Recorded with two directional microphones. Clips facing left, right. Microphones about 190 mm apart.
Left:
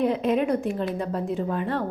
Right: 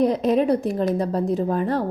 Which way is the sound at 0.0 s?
40° right (ahead or behind).